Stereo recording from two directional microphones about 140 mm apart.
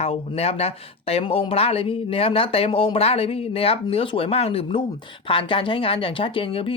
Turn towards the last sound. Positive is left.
turn(degrees=40)  # may be behind; listen again after turning